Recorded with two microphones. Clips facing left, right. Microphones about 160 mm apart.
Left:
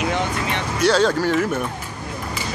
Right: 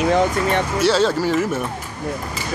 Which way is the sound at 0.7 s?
5° right (ahead or behind).